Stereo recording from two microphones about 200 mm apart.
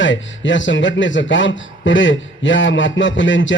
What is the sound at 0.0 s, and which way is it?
A man's voice, 70° left (ahead or behind).